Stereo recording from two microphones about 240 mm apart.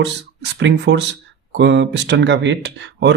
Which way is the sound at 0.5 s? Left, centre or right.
Right.